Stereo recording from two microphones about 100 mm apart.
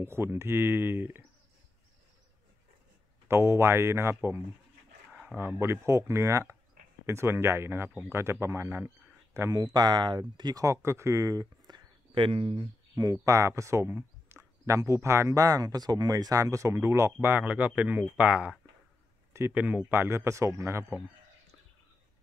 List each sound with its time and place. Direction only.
0.0 s speech: 25° right (ahead or behind)
3.3 s speech: 25° right (ahead or behind); by 12.6 s 60° right (ahead or behind)
12.9 s speech: 35° right (ahead or behind)